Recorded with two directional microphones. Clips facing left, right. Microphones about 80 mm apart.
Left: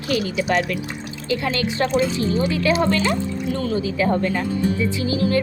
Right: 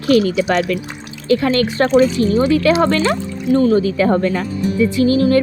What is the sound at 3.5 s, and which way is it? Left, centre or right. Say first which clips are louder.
Speech: right 13 dB; right.